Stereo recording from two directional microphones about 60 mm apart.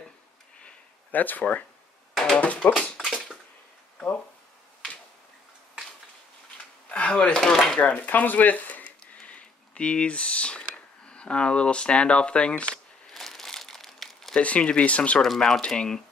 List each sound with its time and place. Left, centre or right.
1.1 s speech: left
3.1 s crushing: centre
6.9 s speech: centre
7.8 s speech: left
9.0 s a sound: left
11.1 s speech: centre
13.1 s crumpling: centre
14.3 s speech: left
15.2 s speech: centre